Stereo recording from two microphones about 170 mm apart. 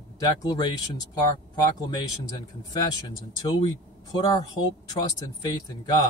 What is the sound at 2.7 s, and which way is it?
Speech, 25° left (ahead or behind).